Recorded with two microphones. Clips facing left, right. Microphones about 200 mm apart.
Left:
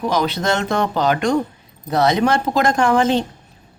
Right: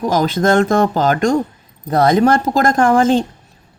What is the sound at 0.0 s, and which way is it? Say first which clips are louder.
A woman's voice: right 4 dB; 45° right (ahead or behind).